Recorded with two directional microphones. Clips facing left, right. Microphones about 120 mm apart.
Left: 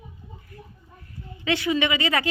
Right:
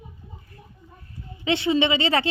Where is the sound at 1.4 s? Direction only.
25° right (ahead or behind).